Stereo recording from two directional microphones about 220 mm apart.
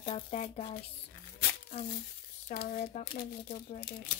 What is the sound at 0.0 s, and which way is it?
Speech, 25° left (ahead or behind).